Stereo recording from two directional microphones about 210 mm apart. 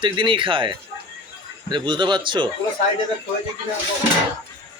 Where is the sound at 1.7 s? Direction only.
20° right (ahead or behind).